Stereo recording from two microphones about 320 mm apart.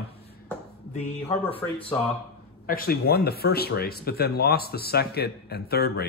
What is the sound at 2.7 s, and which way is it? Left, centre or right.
Speech, left.